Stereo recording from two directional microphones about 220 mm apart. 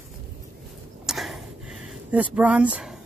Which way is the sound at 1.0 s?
Centre (ahead or behind).